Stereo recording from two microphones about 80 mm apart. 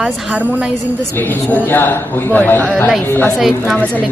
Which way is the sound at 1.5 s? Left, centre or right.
Left.